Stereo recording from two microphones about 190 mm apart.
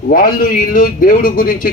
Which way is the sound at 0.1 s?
45° left (ahead or behind).